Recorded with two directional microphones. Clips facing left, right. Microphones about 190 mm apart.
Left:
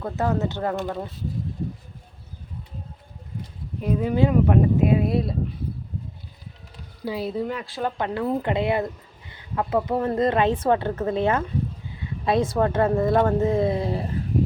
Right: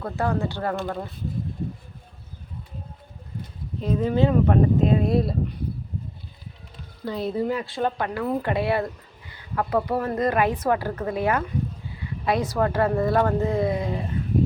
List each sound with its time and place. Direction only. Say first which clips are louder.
0.0 s a woman's voice: left 1 dB; 20° left (ahead or behind)
3.8 s speech: even; 15° left (ahead or behind)
7.0 s speech: right 1 dB; 5° left (ahead or behind)
7.9 s a woman's voice: left 1 dB; 25° left (ahead or behind)